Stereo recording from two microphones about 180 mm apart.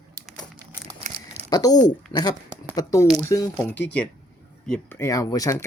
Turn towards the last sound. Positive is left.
turn(degrees=20)  # may be behind; listen again after turning